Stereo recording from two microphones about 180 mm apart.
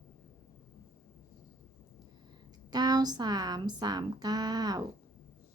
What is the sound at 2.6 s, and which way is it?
A woman's voice, 20° right (ahead or behind).